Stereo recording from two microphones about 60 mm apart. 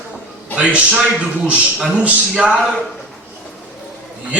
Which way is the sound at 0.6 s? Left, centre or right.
Centre.